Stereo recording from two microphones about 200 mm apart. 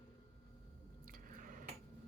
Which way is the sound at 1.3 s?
40° right (ahead or behind).